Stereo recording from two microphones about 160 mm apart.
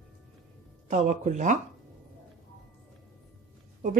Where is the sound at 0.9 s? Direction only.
50° right (ahead or behind).